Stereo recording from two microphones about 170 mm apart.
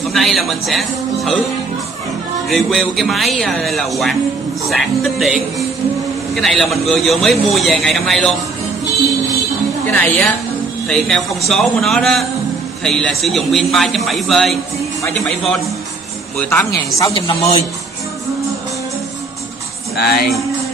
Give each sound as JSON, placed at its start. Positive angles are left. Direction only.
{"t": 0.1, "sound": "a man's voice", "side_deg": 0}
{"t": 2.5, "sound": "a man's voice", "side_deg": 0}
{"t": 9.8, "sound": "a man's voice", "side_deg": 10}
{"t": 20.0, "sound": "music", "side_deg": 70}